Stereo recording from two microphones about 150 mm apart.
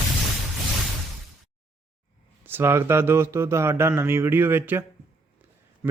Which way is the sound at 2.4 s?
15° right (ahead or behind).